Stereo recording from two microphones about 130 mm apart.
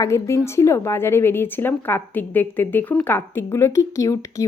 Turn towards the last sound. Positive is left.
turn(degrees=25)  # may be behind; listen again after turning